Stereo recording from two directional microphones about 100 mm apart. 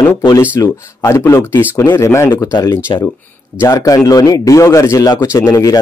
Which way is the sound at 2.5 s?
45° left (ahead or behind).